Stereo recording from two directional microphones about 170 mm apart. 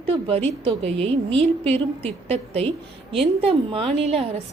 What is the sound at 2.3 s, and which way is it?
A woman's voice, 35° right (ahead or behind).